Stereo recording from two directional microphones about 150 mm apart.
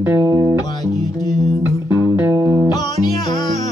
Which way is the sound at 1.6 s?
15° right (ahead or behind).